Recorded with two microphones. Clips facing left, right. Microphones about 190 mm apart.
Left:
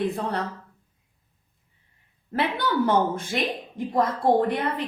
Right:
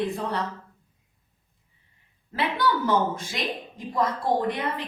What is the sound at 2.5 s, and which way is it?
A woman's voice, 60° left (ahead or behind).